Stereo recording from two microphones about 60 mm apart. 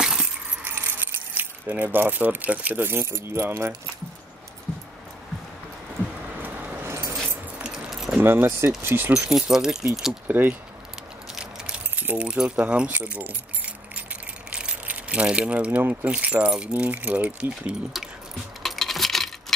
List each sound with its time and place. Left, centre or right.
0.2 s keys jangling: right
6.3 s vehicle: right
6.8 s keys jangling: right
7.6 s keys jangling: centre
8.2 s speech: right
9.3 s speech: centre
10.2 s speech: right
11.3 s a sound: centre
11.9 s keys jangling: right
12.2 s speech: centre
14.5 s keys jangling: centre
15.9 s speech: right
18.6 s coin: centre